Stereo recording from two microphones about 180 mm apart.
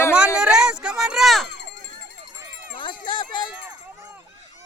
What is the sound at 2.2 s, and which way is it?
Music, 20° right (ahead or behind).